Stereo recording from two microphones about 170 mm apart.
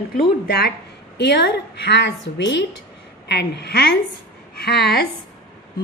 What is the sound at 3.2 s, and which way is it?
A woman's voice, 80° left.